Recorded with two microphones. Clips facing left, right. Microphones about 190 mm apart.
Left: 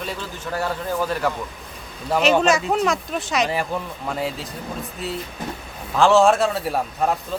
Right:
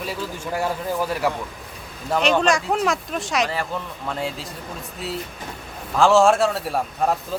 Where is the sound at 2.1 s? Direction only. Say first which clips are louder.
Left 2 dB; 5° left (ahead or behind).